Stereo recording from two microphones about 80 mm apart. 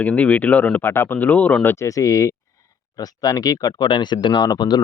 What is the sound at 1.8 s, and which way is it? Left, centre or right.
Speech, left.